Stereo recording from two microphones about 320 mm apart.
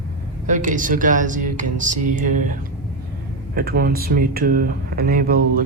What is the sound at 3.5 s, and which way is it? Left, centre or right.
Speech, right.